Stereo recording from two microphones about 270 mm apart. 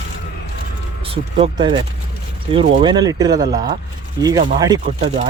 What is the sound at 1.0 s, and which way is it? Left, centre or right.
Speech, centre.